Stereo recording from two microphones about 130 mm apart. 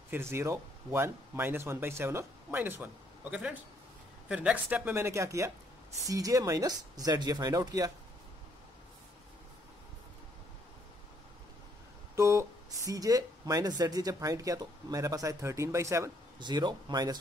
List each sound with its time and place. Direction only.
0.1 s speech: 20° right (ahead or behind)
12.2 s speech: 20° right (ahead or behind)
16.3 s speech: 35° right (ahead or behind)